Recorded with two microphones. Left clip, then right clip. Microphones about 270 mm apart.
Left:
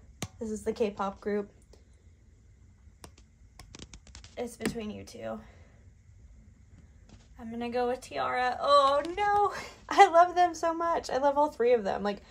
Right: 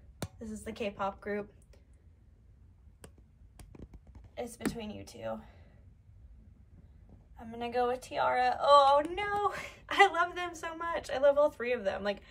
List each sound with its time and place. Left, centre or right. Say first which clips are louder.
0.4 s a woman's voice: left 9 dB; centre
3.7 s a sound: left 7 dB; right
4.4 s a woman's voice: left 3 dB; centre
7.3 s a woman's voice: left 1 dB; centre